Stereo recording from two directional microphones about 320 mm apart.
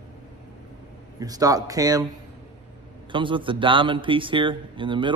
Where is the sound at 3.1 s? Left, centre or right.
Centre.